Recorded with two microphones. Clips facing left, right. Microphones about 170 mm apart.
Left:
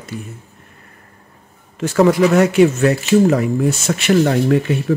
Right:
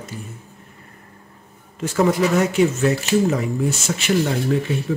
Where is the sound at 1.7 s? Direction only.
75° left (ahead or behind).